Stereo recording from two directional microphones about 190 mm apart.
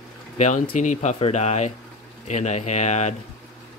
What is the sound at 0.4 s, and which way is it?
Speech, 40° left (ahead or behind).